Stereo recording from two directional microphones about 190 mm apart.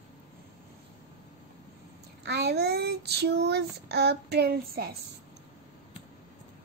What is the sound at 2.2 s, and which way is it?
Speech, 60° right (ahead or behind).